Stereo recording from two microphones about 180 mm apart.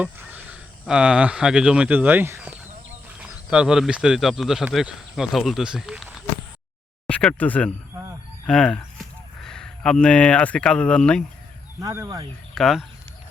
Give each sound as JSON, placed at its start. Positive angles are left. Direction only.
{"t": 0.0, "sound": "speech", "side_deg": -10}
{"t": 11.8, "sound": "speech", "side_deg": -20}
{"t": 12.5, "sound": "speech", "side_deg": 0}